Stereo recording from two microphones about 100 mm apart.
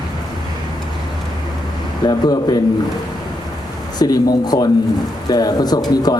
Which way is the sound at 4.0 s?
40° left (ahead or behind).